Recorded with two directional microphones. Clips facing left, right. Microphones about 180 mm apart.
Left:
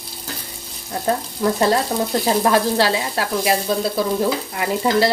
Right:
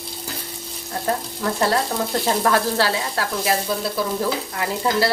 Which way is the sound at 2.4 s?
15° left (ahead or behind).